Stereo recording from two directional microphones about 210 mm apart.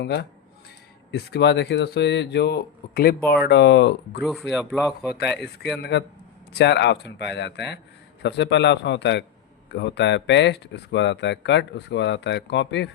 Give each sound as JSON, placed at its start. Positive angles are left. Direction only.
{"t": 0.0, "sound": "speech", "side_deg": 55}
{"t": 4.2, "sound": "speech", "side_deg": 0}
{"t": 6.5, "sound": "speech", "side_deg": 55}